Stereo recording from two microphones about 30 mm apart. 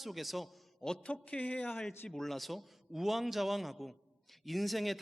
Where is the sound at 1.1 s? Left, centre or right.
Left.